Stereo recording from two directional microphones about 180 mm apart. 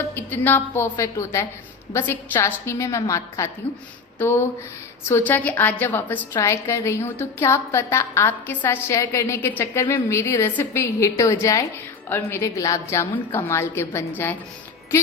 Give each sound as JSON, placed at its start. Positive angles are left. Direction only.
{"t": 0.1, "sound": "a woman's voice", "side_deg": 10}